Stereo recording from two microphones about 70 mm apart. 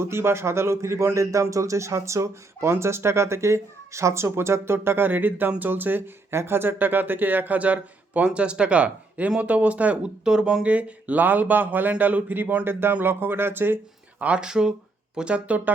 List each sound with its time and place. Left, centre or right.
0.0 s a man's voice: right
14.2 s speech: centre